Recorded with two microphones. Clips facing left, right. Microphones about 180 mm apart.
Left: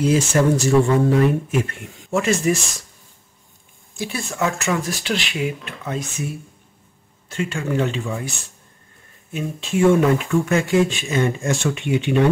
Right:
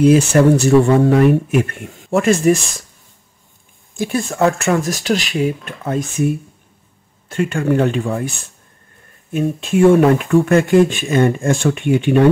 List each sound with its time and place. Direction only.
0.0 s speech: 60° right (ahead or behind)
4.0 s speech: 50° right (ahead or behind)
7.2 s speech: 55° right (ahead or behind)
9.3 s speech: 55° right (ahead or behind)